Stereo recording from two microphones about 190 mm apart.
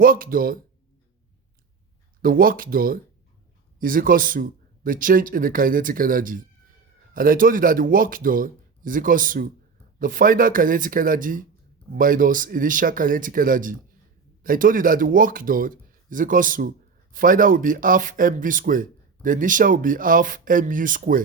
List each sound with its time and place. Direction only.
0.0 s speech: 50° right (ahead or behind)
2.2 s speech: 50° right (ahead or behind)